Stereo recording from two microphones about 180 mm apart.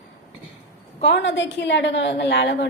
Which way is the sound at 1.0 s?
75° left (ahead or behind).